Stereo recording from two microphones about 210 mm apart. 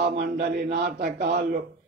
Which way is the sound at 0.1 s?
50° right (ahead or behind).